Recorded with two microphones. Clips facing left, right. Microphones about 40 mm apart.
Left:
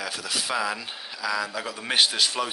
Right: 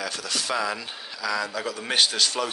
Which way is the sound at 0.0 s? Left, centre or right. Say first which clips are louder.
Even; centre.